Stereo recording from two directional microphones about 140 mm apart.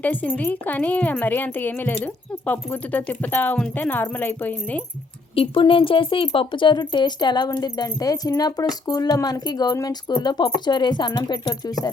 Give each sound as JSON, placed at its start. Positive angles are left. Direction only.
{"t": 0.0, "sound": "speech", "side_deg": 10}
{"t": 5.3, "sound": "speech", "side_deg": 40}